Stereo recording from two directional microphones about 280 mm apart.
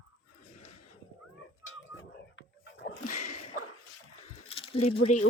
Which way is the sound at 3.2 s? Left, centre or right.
Left.